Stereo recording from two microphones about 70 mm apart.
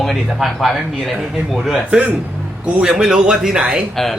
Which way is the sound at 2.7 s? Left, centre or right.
Centre.